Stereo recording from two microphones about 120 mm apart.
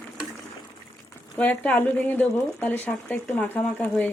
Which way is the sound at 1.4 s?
10° left (ahead or behind).